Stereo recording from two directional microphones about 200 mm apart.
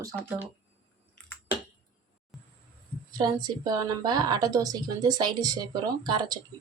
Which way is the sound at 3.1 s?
20° right (ahead or behind).